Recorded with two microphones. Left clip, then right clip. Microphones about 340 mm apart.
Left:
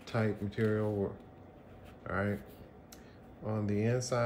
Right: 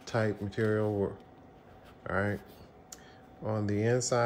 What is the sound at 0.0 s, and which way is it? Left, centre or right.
Speech, centre.